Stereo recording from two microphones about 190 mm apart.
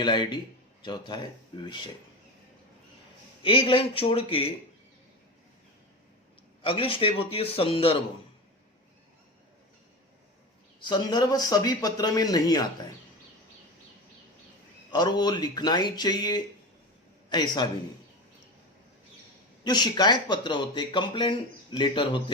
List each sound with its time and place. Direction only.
0.0 s speech: 25° left (ahead or behind)
3.4 s speech: 30° left (ahead or behind)
6.6 s speech: 30° left (ahead or behind)
10.8 s speech: 25° left (ahead or behind)
14.9 s a man's voice: 20° left (ahead or behind)
19.6 s speech: 20° left (ahead or behind)